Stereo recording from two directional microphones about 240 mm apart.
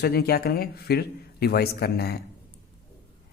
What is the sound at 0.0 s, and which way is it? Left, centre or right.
Speech, left.